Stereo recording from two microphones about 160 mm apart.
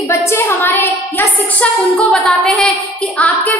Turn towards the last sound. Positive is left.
turn(degrees=5)  # may be behind; listen again after turning